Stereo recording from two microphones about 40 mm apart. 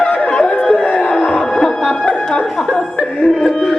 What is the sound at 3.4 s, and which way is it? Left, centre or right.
Music, centre.